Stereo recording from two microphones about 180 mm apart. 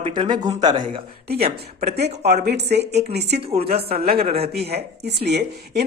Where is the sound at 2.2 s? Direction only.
65° right (ahead or behind).